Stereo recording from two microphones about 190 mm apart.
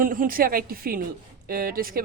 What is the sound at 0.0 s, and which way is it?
A woman's voice, 45° right (ahead or behind).